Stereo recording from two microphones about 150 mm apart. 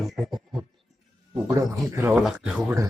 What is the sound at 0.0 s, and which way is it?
Music, centre (ahead or behind).